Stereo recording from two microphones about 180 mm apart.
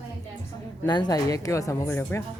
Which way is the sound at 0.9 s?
20° left (ahead or behind).